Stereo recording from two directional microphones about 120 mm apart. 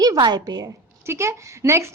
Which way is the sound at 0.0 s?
35° right (ahead or behind).